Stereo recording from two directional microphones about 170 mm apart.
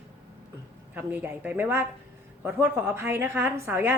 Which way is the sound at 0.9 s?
10° right (ahead or behind).